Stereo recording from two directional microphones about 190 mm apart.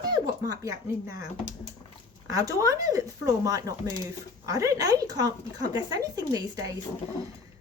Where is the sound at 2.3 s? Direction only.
15° right (ahead or behind).